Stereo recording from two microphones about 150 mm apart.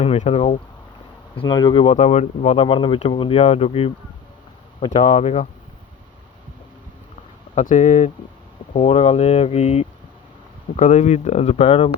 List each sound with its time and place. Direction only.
0.0 s speech: 50° left (ahead or behind)
1.4 s speech: 30° left (ahead or behind); by 5.5 s 50° left (ahead or behind)
7.5 s speech: 55° left (ahead or behind)
10.8 s speech: 55° left (ahead or behind); by 11.9 s 40° left (ahead or behind)